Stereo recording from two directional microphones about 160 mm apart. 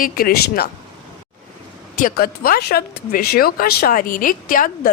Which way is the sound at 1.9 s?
60° left (ahead or behind).